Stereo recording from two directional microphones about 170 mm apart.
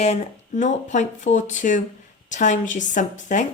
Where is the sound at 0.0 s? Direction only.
40° left (ahead or behind).